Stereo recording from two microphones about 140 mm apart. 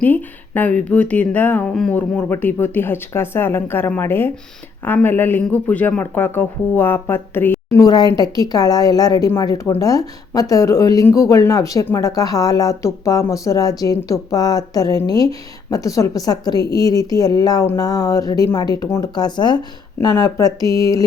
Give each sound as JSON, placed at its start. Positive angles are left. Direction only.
{"t": 0.0, "sound": "speech", "side_deg": 10}